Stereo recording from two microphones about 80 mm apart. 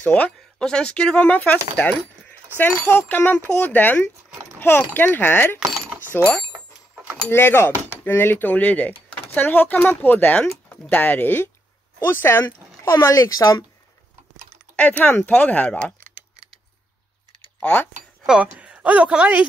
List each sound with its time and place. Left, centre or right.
0.0 s speech: centre
12.9 s speech: left
14.3 s typing: centre
15.1 s speech: left
17.6 s speech: left
18.4 s speech: centre